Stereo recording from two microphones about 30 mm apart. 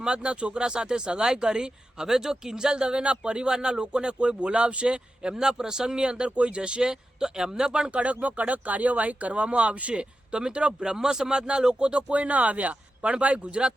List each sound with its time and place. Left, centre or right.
0.0 s speech: right
2.0 s speech: centre
4.2 s speech: right
5.2 s speech: right
6.0 s speech: right
7.2 s speech: right
7.9 s speech: right
10.8 s speech: centre
12.1 s speech: right
13.1 s speech: right